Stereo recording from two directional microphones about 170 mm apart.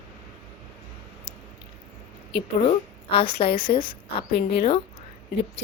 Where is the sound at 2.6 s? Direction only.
35° left (ahead or behind).